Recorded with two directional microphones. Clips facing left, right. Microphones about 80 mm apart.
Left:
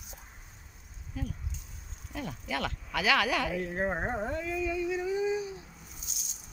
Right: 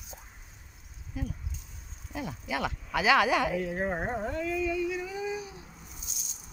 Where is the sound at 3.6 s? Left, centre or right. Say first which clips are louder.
Right 1 dB; left.